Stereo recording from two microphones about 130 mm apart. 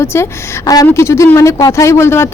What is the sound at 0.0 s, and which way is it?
Speech, 20° left (ahead or behind).